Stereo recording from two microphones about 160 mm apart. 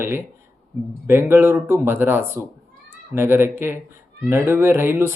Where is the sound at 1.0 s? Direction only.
15° right (ahead or behind).